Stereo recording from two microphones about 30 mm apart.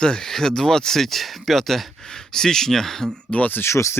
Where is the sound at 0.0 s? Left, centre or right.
Left; by 1.9 s centre.